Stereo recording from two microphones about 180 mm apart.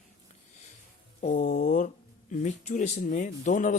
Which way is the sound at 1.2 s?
40° left (ahead or behind).